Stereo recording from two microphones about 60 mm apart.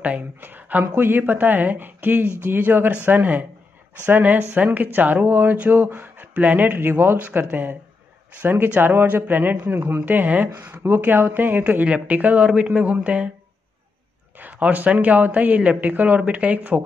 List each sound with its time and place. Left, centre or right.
0.0 s a sound: right
0.9 s a woman's voice: right; by 13.3 s centre
14.4 s speech: right